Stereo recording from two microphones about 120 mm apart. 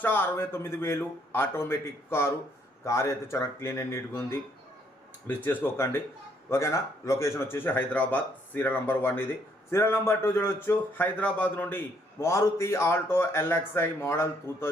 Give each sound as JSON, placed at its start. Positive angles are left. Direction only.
{"t": 0.0, "sound": "speech", "side_deg": 15}
{"t": 5.4, "sound": "speech", "side_deg": 15}